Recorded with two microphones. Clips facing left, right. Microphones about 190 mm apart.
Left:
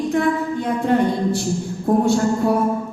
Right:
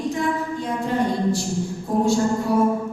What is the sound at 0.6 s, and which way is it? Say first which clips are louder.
A woman's voice: left 5 dB; 60° left (ahead or behind).